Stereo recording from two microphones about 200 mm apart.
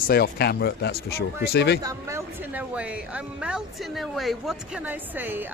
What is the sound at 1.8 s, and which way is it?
Speech, 15° right (ahead or behind).